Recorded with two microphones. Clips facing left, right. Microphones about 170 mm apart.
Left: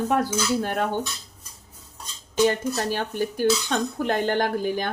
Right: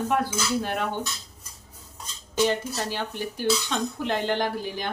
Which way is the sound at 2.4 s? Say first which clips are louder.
Left 4 dB; 50° left (ahead or behind).